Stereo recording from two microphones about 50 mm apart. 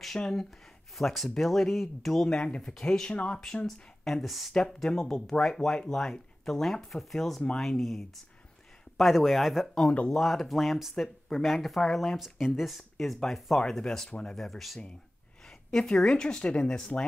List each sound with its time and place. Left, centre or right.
0.2 s speech: centre
3.6 s speech: centre
12.2 s speech: centre
15.7 s speech: centre